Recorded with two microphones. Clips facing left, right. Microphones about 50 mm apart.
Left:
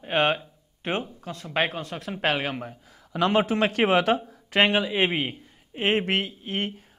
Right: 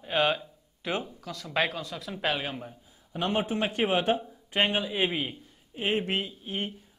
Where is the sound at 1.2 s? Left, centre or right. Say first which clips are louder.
Left 2 dB; left.